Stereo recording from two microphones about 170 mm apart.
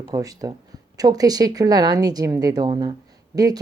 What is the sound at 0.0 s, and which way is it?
A woman's voice, 20° right (ahead or behind).